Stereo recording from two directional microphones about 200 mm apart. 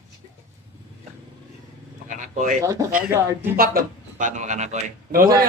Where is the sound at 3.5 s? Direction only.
45° right (ahead or behind).